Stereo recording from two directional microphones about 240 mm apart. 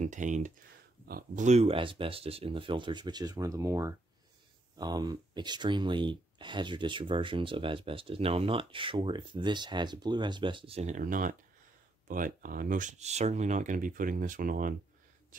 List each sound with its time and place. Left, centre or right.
0.0 s speech: right